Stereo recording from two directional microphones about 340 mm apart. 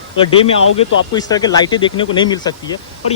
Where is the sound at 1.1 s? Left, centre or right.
Centre.